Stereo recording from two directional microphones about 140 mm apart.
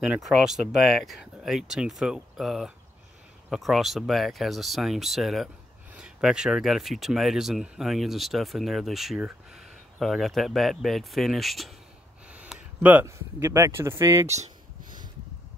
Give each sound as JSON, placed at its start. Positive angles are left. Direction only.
{"t": 0.0, "sound": "speech", "side_deg": -5}
{"t": 12.3, "sound": "a sound", "side_deg": -10}
{"t": 13.4, "sound": "speech", "side_deg": -25}